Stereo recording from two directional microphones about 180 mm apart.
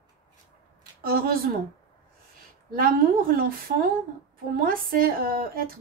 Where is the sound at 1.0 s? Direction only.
55° right (ahead or behind).